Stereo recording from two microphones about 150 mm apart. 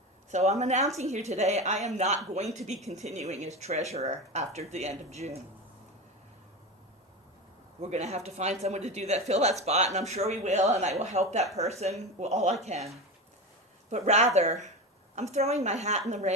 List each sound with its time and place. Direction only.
0.3 s speech: 45° right (ahead or behind)
7.8 s speech: 50° right (ahead or behind)
13.9 s speech: 45° right (ahead or behind)